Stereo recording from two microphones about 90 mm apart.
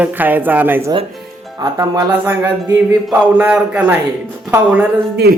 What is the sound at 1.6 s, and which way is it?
Speech, 50° right (ahead or behind).